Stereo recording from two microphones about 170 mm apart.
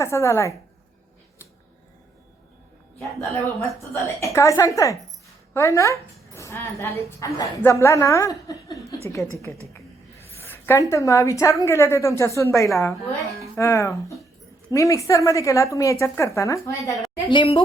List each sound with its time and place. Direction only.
0.0 s a woman's voice: 15° left (ahead or behind)
3.9 s a woman's voice: 15° left (ahead or behind)
12.9 s a woman's voice: centre (ahead or behind)
13.6 s a woman's voice: 15° left (ahead or behind)
17.2 s speech: 30° left (ahead or behind)